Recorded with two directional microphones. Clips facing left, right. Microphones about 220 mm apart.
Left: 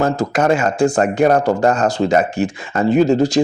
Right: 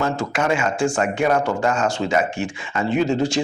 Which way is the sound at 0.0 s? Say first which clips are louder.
Left 6 dB; 40° left (ahead or behind).